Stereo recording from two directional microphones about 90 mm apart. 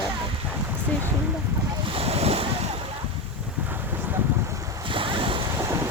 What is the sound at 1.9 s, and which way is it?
Waves, 90° right.